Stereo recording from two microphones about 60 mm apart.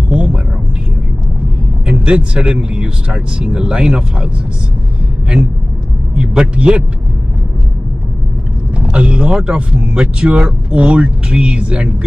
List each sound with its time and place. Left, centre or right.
0.1 s a sound: centre
1.9 s speech: centre
6.1 s speech: centre
8.7 s speech: centre